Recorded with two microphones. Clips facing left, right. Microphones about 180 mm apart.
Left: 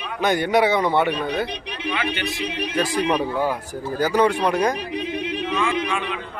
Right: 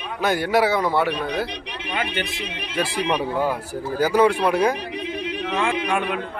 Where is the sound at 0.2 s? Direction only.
5° right (ahead or behind).